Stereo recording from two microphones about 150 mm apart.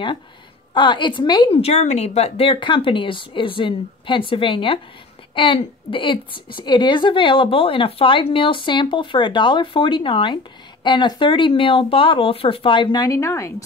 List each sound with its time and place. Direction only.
0.7 s a woman's voice: 30° left (ahead or behind)